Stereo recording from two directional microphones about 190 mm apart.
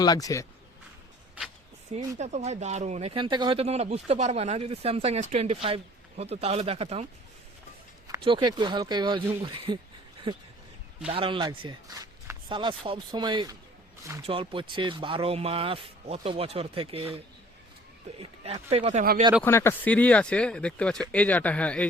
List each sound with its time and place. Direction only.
0.0 s speech: 20° left (ahead or behind)
2.1 s speech: 35° right (ahead or behind)
8.0 s speech: 20° right (ahead or behind)
11.1 s speech: 25° right (ahead or behind)
18.2 s speech: 30° right (ahead or behind)
19.4 s speech: 15° left (ahead or behind)